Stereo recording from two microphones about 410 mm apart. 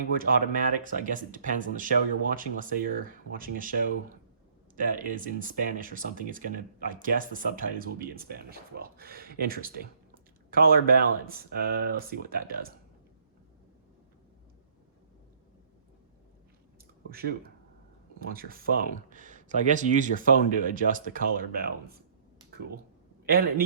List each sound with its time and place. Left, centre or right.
0.2 s speech: right
17.1 s speech: right
23.2 s a man's voice: right